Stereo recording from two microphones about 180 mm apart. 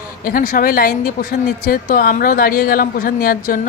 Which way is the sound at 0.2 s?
50° left (ahead or behind).